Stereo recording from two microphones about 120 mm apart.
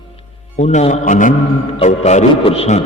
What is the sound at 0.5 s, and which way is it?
Speech, 75° left (ahead or behind).